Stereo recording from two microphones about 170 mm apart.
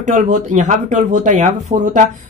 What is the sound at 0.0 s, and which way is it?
Speech, 45° right (ahead or behind).